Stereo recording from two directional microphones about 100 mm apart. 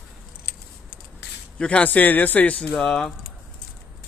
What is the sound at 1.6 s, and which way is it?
Speech, 10° left (ahead or behind).